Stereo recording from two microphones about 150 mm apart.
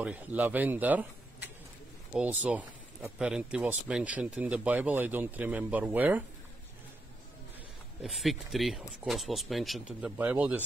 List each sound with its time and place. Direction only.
0.0 s speech: 10° right (ahead or behind)
8.0 s speech: centre (ahead or behind)